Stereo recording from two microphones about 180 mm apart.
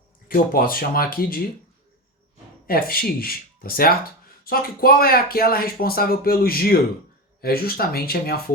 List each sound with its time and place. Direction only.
0.3 s speech: 55° left (ahead or behind)
2.6 s speech: 55° left (ahead or behind)